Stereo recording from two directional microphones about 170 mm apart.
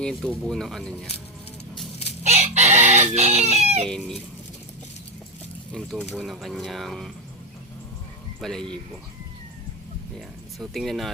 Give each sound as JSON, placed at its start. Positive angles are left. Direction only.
{"t": 0.0, "sound": "speech", "side_deg": 5}
{"t": 2.2, "sound": "chicken", "side_deg": -40}
{"t": 3.8, "sound": "speech", "side_deg": 5}
{"t": 5.7, "sound": "speech", "side_deg": 5}
{"t": 8.4, "sound": "speech", "side_deg": 5}
{"t": 10.2, "sound": "speech", "side_deg": 0}